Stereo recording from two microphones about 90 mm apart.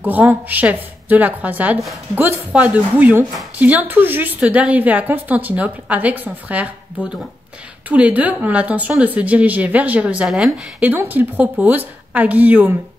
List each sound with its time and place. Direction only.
0.0 s a woman's voice: 20° right (ahead or behind)
7.9 s a woman's voice: 15° right (ahead or behind)
10.2 s a woman's voice: 5° right (ahead or behind)
10.8 s a woman's voice: 20° right (ahead or behind)